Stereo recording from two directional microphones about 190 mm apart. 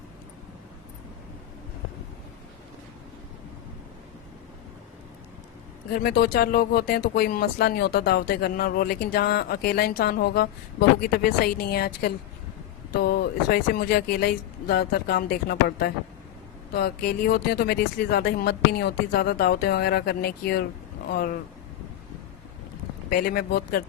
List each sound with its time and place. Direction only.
5.9 s speech: 55° left (ahead or behind)
23.0 s speech: 55° left (ahead or behind)